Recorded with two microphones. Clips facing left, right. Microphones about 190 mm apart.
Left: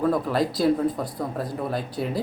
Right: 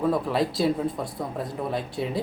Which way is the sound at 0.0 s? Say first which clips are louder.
Left 1 dB; centre (ahead or behind).